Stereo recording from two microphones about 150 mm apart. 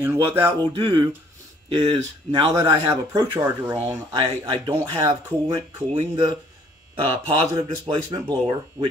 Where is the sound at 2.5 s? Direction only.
25° right (ahead or behind).